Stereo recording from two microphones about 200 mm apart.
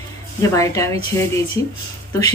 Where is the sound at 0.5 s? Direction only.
15° left (ahead or behind).